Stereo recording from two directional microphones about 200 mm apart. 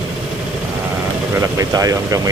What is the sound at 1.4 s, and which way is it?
Speech, 15° right (ahead or behind).